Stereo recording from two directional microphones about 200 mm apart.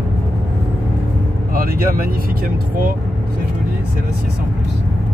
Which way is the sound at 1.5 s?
45° right (ahead or behind).